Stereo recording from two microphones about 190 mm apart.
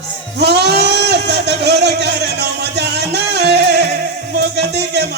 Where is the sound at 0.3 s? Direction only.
60° right (ahead or behind).